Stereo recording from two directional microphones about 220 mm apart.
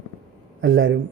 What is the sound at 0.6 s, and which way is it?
Speech, 55° right (ahead or behind).